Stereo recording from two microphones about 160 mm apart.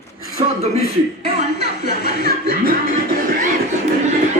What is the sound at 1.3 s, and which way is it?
A woman's voice, 90° left.